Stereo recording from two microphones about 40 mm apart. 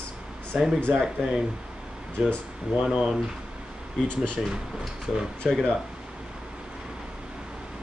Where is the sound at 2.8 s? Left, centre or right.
Right.